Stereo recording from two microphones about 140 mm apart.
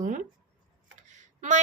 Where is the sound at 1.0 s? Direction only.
65° right (ahead or behind).